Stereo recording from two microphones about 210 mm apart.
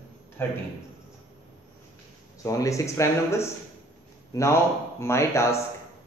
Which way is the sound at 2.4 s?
15° left (ahead or behind).